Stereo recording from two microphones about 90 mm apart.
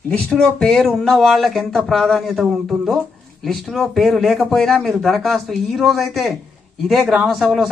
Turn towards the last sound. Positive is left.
turn(degrees=0)  # may be behind; listen again after turning